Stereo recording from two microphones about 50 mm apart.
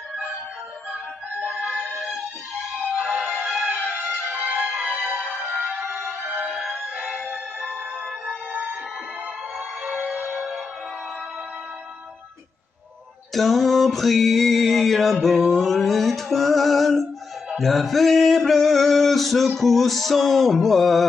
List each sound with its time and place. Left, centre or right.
1.6 s music: right; by 6.7 s centre
6.8 s music: centre
9.8 s music: centre
13.3 s a sound: centre
17.6 s male singing: centre